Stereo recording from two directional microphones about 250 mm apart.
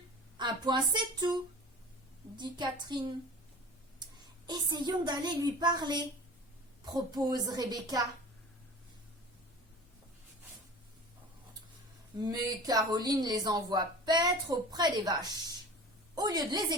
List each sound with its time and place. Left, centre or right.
0.3 s speech: centre
4.0 s speech: centre
12.1 s speech: centre